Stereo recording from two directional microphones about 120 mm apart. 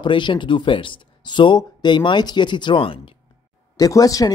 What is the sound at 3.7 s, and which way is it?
Speech, 30° left (ahead or behind).